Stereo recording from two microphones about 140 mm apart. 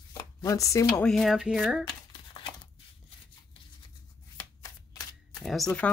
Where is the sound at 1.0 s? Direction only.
Centre (ahead or behind).